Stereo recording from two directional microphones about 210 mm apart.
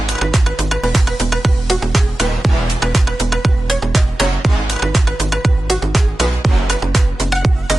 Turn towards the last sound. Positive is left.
turn(degrees=0)  # may be behind; listen again after turning